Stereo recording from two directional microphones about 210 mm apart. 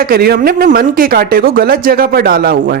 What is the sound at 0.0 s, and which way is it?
Speech, 45° right (ahead or behind).